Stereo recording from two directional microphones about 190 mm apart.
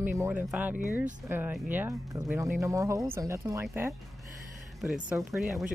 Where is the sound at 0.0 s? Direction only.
10° right (ahead or behind).